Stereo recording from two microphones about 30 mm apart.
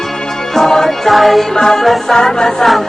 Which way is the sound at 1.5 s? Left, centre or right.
Centre.